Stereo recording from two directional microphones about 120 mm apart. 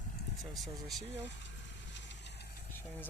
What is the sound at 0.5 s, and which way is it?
Speech, centre (ahead or behind).